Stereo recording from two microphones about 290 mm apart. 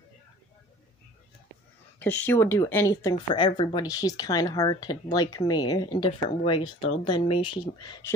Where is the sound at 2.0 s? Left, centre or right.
Centre.